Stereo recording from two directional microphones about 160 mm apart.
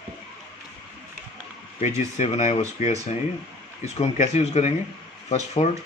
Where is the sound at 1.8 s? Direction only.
45° left (ahead or behind).